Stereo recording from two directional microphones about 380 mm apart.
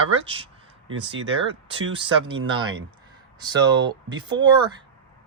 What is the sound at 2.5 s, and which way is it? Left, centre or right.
Speech, centre.